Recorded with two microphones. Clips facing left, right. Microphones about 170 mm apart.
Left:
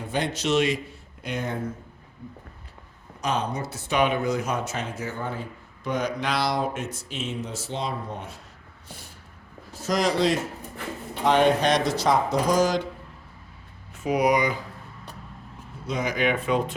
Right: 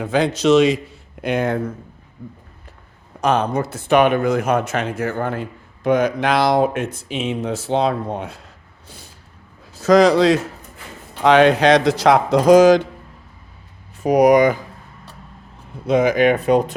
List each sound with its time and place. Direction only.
0.0 s speech: 90° right
1.2 s a man's voice: 70° right (ahead or behind)
3.2 s speech: 55° right (ahead or behind); by 5.5 s 85° right
5.8 s speech: 50° right (ahead or behind); by 8.3 s 70° right (ahead or behind)
9.8 s a man's voice: 75° right (ahead or behind); by 12.9 s 90° right
14.0 s speech: 45° right (ahead or behind)
15.9 s speech: 55° right (ahead or behind); by 16.7 s 40° right (ahead or behind)